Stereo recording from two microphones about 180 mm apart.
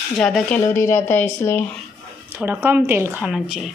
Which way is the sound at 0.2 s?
5° left (ahead or behind).